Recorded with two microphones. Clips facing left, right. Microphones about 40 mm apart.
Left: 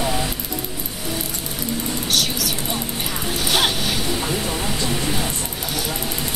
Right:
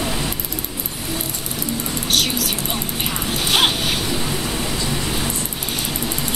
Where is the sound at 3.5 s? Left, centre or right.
Right.